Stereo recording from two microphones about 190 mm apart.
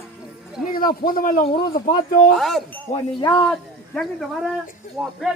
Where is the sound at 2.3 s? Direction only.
Centre (ahead or behind).